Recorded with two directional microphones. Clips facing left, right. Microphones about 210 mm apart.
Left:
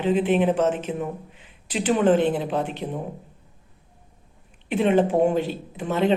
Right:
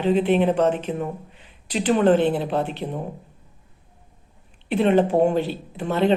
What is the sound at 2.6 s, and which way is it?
Speech, centre (ahead or behind).